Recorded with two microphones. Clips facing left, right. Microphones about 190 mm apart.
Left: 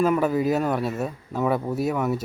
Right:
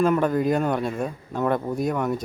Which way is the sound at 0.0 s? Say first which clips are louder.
Even; 5° left (ahead or behind).